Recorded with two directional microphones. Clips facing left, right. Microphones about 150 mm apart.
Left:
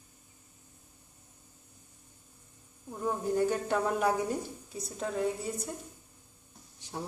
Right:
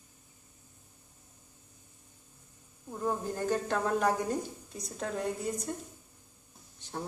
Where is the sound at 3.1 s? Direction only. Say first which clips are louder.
Left 3 dB; 5° left (ahead or behind).